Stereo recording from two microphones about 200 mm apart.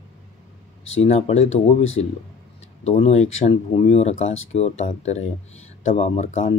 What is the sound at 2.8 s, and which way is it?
Speech, 30° left (ahead or behind).